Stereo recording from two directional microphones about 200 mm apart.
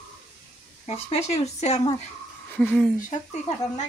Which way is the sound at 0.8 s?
35° left (ahead or behind).